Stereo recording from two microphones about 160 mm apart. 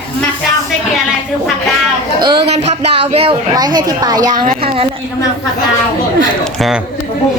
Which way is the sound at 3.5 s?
25° right (ahead or behind).